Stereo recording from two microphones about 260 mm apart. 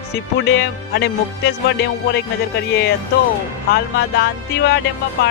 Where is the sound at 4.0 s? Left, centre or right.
Left.